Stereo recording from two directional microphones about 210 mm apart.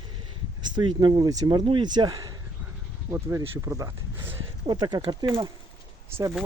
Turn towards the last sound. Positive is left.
turn(degrees=-10)  # may be behind; listen again after turning